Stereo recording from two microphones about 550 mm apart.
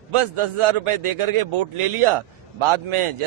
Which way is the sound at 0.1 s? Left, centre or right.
Right.